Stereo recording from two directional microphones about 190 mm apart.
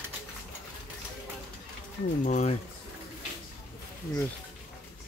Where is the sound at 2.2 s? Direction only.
40° left (ahead or behind).